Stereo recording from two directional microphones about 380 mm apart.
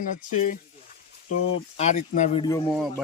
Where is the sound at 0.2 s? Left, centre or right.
Left.